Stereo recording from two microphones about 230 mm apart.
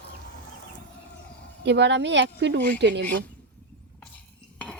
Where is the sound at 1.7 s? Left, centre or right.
Right.